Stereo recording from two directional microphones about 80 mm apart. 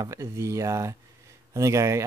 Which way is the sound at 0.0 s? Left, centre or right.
Right.